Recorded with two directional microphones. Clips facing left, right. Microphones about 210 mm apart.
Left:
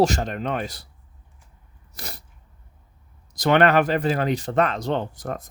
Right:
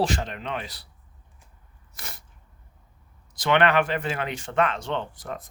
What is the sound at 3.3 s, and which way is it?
Speech, 40° left (ahead or behind).